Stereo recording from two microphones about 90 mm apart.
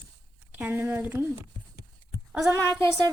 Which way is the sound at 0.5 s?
20° right (ahead or behind).